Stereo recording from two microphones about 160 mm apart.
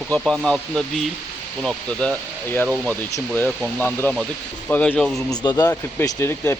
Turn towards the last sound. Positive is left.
turn(degrees=15)  # may be behind; listen again after turning